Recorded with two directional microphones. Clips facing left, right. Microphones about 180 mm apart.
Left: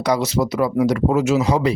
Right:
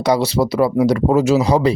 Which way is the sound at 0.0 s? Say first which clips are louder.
Right 3 dB; 30° right (ahead or behind).